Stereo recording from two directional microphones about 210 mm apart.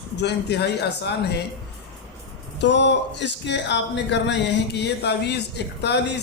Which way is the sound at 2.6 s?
55° left (ahead or behind).